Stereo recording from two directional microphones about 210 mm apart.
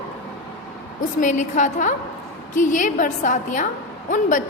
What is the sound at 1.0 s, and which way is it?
A woman's voice, 35° left (ahead or behind).